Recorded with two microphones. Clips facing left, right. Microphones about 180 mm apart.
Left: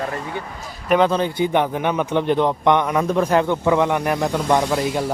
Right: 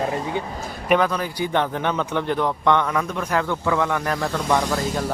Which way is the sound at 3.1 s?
30° left (ahead or behind).